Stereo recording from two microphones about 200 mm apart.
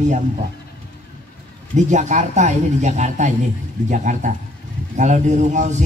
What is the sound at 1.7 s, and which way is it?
Speech, 35° right (ahead or behind).